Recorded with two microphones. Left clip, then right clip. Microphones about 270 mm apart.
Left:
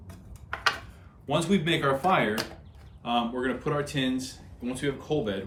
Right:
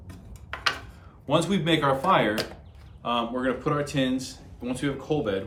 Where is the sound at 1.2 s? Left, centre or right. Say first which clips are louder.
Right 2 dB; centre.